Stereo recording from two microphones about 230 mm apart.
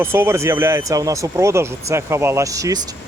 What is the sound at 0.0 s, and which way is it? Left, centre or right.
Speech, centre.